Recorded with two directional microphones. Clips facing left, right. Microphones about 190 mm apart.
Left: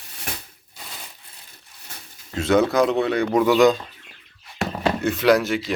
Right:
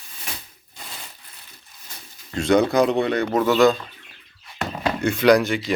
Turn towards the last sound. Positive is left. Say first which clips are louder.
# right 2 dB
turn(degrees=5)  # may be behind; listen again after turning